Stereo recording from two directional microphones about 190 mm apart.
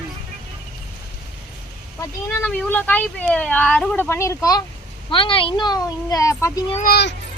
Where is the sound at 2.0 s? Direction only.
10° left (ahead or behind).